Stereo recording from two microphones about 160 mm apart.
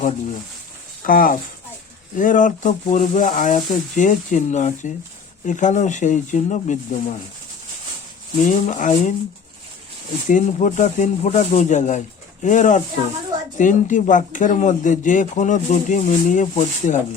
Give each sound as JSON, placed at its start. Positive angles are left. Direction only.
{"t": 1.0, "sound": "speech", "side_deg": 65}
{"t": 8.4, "sound": "speech", "side_deg": 50}
{"t": 10.2, "sound": "speech", "side_deg": 50}